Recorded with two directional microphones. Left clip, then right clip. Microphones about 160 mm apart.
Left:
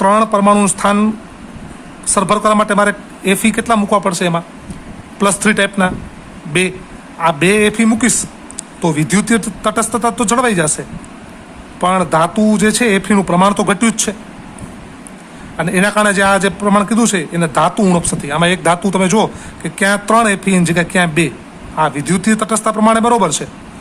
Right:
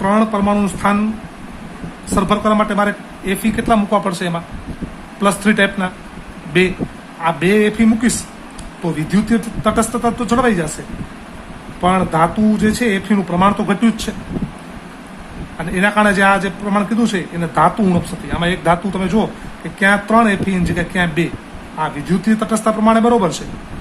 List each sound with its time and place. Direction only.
0.0 s speech: 45° left (ahead or behind)
2.1 s a man's voice: 45° left (ahead or behind)
7.2 s a man's voice: 40° left (ahead or behind)
11.8 s a man's voice: 40° left (ahead or behind)
15.5 s a man's voice: 40° left (ahead or behind)